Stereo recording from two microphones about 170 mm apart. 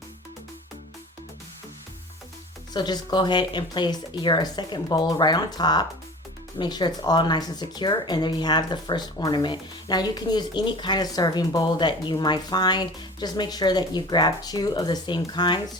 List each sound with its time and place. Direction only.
2.7 s speech: 25° left (ahead or behind)